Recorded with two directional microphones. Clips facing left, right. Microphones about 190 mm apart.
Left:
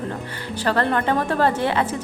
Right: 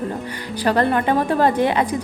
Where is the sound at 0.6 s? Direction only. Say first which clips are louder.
Right 3 dB; 15° right (ahead or behind).